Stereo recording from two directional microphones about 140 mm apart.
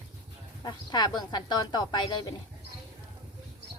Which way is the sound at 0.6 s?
30° left (ahead or behind).